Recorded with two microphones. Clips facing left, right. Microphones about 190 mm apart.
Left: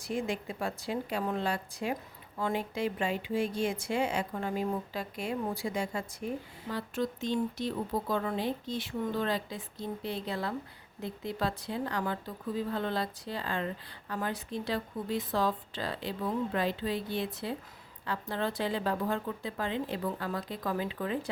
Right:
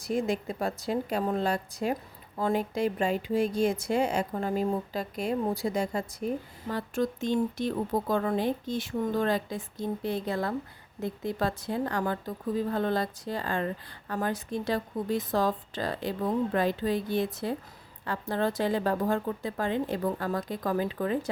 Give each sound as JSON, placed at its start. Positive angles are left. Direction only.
{"t": 0.0, "sound": "a woman's voice", "side_deg": -40}